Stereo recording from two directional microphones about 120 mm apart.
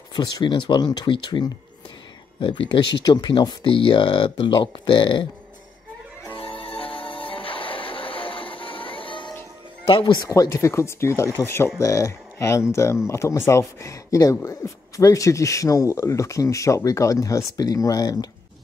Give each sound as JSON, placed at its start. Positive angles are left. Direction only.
{"t": 0.1, "sound": "speech", "side_deg": 40}
{"t": 6.3, "sound": "music", "side_deg": 50}
{"t": 9.8, "sound": "speech", "side_deg": 40}